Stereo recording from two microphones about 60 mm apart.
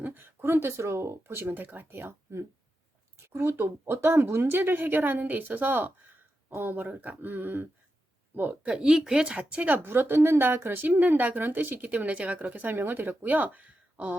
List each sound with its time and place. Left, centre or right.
0.0 s a sound: right
0.5 s speech: right
3.2 s speech: right
6.5 s speech: right
6.8 s speech: right
8.6 s speech: centre; by 13.3 s right
13.3 s speech: right